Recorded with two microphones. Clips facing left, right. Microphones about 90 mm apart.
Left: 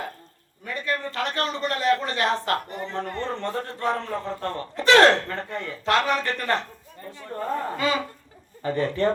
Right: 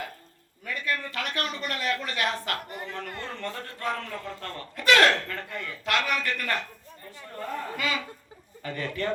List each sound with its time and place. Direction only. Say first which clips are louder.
0.6 s a man's voice: left 3 dB; 35° left (ahead or behind)